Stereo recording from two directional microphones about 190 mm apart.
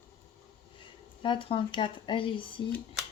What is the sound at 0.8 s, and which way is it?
Speech, 25° left (ahead or behind).